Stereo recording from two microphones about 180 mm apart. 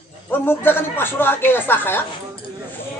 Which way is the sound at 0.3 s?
10° left (ahead or behind).